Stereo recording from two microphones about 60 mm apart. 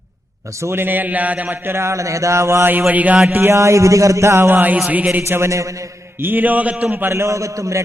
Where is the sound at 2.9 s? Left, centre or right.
Right.